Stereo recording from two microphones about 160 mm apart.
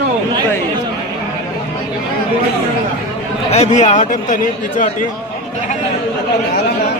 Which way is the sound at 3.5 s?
45° left (ahead or behind).